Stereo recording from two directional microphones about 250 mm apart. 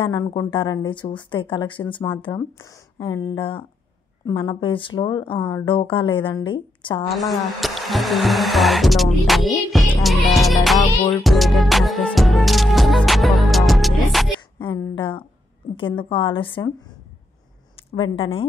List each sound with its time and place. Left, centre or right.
0.0 s speech: centre
7.1 s speech: centre
11.2 s music: centre
14.6 s speech: centre
17.9 s speech: left